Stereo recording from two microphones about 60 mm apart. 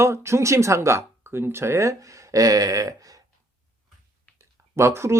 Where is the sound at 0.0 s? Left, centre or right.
Right.